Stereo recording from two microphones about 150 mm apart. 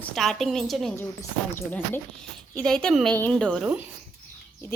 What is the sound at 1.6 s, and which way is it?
A woman's voice, 15° left (ahead or behind).